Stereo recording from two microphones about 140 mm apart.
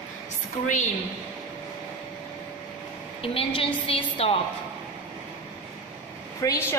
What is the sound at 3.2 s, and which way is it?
A woman's voice, 40° left (ahead or behind).